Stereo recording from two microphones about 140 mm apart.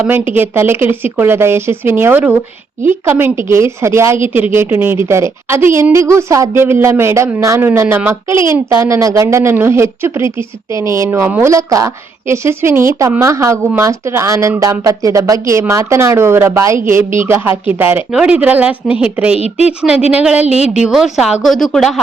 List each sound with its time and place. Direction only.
0.0 s a woman's voice: 15° right (ahead or behind)
19.4 s a woman's voice: 50° left (ahead or behind)
20.1 s speech: 10° right (ahead or behind)
20.5 s a woman's voice: 50° left (ahead or behind)
20.8 s a woman's voice: 5° right (ahead or behind)